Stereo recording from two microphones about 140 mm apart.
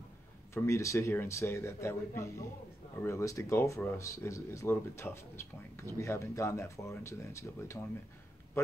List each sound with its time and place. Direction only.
0.6 s speech: 20° left (ahead or behind)